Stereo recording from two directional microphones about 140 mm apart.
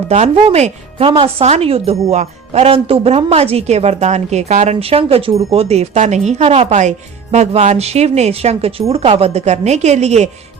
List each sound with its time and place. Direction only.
0.1 s speech: 50° right (ahead or behind)